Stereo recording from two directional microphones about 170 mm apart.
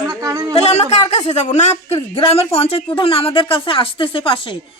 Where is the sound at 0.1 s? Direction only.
20° right (ahead or behind).